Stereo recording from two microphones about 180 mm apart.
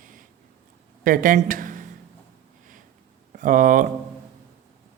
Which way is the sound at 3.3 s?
50° right (ahead or behind).